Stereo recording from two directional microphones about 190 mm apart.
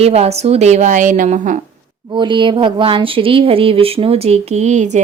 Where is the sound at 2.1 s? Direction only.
25° right (ahead or behind).